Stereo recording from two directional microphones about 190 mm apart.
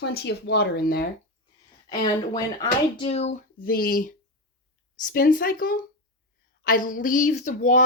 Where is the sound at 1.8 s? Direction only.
20° left (ahead or behind).